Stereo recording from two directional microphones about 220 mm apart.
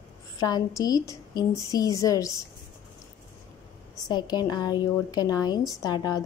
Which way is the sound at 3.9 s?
15° left (ahead or behind).